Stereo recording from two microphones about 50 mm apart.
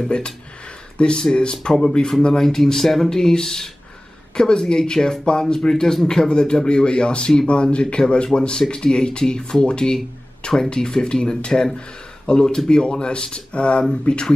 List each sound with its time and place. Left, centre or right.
0.0 s speech: centre